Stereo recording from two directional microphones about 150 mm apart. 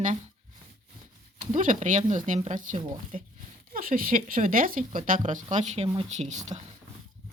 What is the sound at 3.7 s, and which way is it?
Speech, 70° right (ahead or behind).